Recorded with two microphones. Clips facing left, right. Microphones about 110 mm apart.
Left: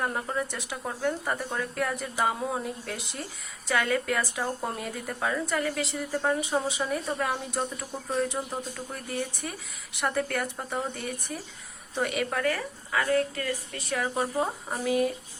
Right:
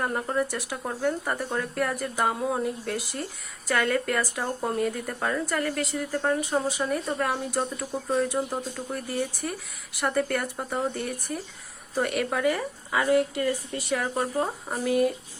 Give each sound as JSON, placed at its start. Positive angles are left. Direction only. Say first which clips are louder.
{"t": 0.0, "sound": "speech", "louder": "right 3 dB", "side_deg": 0}
{"t": 12.5, "sound": "speech", "louder": "right 2 dB", "side_deg": -15}
{"t": 13.9, "sound": "speech", "louder": "right 1 dB", "side_deg": 0}